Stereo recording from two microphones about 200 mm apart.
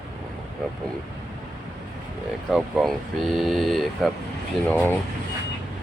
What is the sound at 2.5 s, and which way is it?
Speech, centre (ahead or behind).